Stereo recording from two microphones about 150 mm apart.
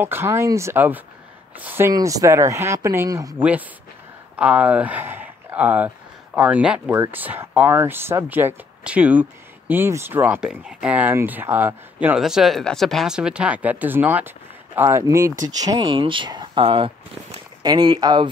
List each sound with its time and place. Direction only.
0.0 s speech: 15° right (ahead or behind)
3.3 s speech: 10° right (ahead or behind); by 18.3 s 30° right (ahead or behind)